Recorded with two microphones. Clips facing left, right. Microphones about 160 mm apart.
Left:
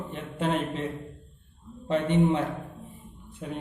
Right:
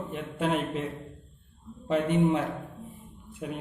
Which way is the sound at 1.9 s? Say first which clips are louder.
Left 1 dB; 5° right (ahead or behind).